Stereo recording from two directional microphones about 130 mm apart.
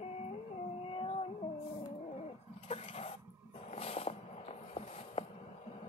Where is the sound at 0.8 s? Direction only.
45° left (ahead or behind).